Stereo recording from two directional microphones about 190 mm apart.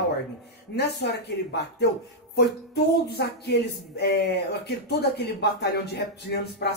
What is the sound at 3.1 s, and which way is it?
Speech, 60° left (ahead or behind).